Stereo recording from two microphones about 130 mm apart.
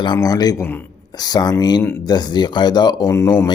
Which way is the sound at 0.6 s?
15° left (ahead or behind).